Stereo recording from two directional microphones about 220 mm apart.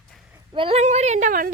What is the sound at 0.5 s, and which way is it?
Speech, 25° right (ahead or behind).